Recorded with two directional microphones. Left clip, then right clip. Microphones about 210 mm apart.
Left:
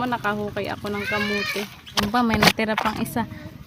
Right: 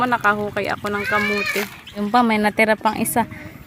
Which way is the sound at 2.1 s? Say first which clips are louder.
Right 3 dB; 25° right (ahead or behind).